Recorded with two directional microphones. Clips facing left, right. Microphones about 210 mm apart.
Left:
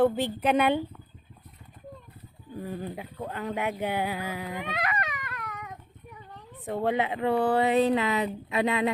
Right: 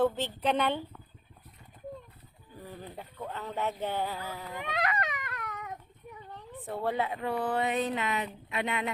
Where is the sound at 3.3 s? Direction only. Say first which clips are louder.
Left 3 dB; 10° left (ahead or behind).